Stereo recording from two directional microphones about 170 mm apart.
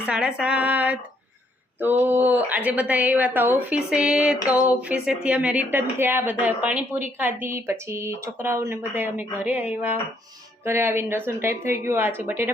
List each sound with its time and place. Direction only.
0.1 s a woman's voice: 5° right (ahead or behind)